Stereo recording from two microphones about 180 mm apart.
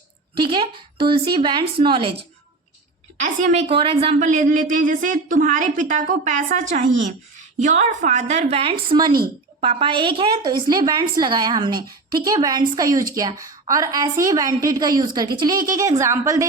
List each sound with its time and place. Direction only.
0.3 s a woman's voice: 30° right (ahead or behind)
3.7 s a woman's voice: 30° right (ahead or behind)